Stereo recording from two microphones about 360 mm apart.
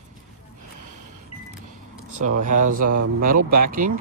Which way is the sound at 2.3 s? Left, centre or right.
Right.